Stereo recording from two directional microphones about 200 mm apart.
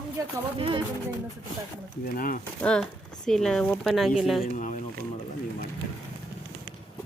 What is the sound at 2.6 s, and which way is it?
A woman's voice, 5° left (ahead or behind).